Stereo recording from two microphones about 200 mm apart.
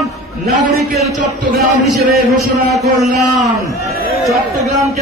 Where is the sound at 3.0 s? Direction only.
Centre (ahead or behind).